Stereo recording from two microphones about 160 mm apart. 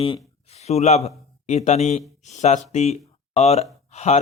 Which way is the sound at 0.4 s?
45° left (ahead or behind).